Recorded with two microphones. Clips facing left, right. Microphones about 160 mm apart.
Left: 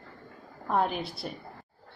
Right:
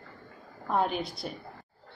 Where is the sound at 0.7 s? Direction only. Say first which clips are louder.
Even; centre (ahead or behind).